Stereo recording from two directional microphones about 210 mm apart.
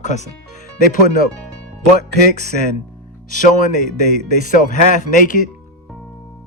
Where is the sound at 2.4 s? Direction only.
40° left (ahead or behind).